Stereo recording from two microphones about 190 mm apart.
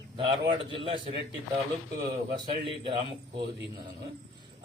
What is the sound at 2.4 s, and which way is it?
Speech, 25° right (ahead or behind).